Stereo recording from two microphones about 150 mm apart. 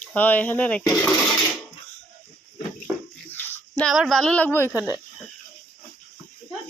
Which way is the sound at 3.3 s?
15° left (ahead or behind).